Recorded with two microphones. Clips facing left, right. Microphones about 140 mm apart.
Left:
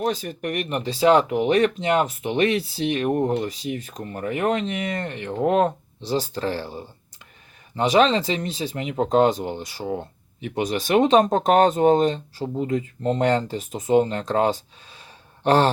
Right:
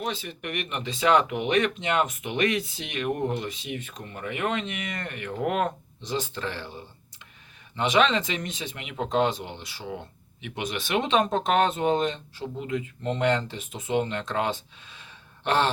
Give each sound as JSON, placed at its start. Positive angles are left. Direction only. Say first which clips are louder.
{"t": 0.0, "sound": "speech", "louder": "left 7 dB", "side_deg": 40}